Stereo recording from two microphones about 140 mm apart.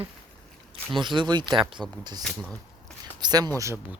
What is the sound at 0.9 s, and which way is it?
Speech, 35° right (ahead or behind).